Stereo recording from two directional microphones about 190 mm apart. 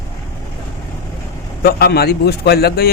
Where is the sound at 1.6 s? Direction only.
55° left (ahead or behind).